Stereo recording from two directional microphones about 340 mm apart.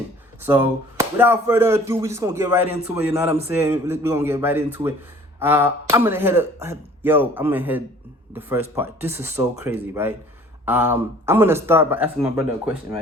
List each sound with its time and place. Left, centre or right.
0.4 s speech: centre